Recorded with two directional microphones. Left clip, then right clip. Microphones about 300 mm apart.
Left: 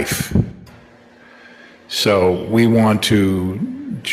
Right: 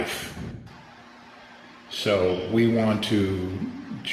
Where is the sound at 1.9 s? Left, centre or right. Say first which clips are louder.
Left 8 dB; left.